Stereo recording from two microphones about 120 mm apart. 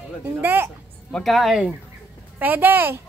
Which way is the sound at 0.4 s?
15° right (ahead or behind).